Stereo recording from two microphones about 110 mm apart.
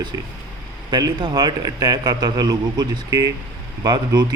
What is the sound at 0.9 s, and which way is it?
Speech, 40° right (ahead or behind).